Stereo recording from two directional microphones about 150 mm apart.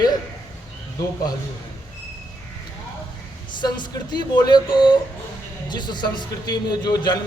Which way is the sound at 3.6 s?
30° left (ahead or behind).